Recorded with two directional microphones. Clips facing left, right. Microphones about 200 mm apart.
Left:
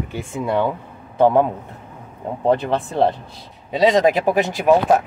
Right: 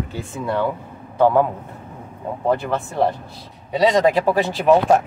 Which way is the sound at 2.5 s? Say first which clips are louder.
Left 3 dB; 25° left (ahead or behind).